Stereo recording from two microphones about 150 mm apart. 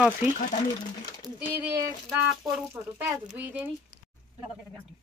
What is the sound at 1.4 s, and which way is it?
Speech, 10° right (ahead or behind).